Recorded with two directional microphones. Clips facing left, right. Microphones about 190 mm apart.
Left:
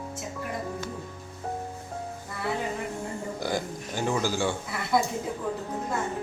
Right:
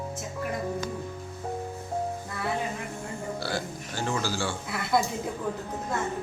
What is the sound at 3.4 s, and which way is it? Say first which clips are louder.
Burping: left 2 dB; 15° left (ahead or behind).